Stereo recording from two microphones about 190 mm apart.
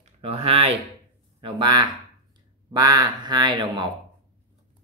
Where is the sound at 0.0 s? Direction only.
30° right (ahead or behind).